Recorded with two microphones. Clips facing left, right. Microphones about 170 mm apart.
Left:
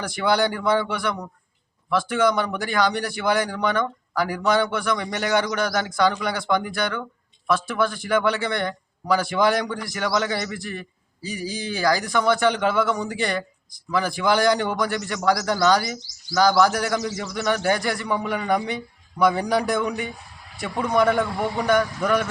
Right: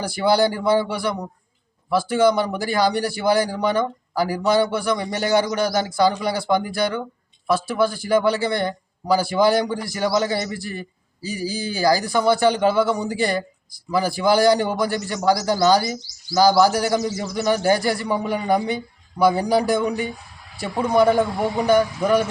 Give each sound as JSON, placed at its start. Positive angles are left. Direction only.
{"t": 0.0, "sound": "a man's voice", "side_deg": -35}